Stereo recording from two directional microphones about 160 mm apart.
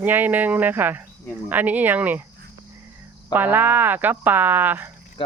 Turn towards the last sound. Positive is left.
turn(degrees=-10)  # may be behind; listen again after turning